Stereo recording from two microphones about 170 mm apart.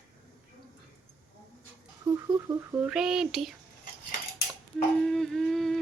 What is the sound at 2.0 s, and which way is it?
Speech, 20° right (ahead or behind).